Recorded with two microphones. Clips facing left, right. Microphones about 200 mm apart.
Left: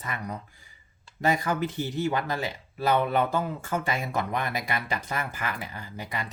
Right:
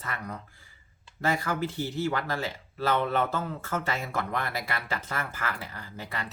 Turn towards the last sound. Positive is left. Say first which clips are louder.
# left 2 dB
turn(degrees=15)  # may be behind; listen again after turning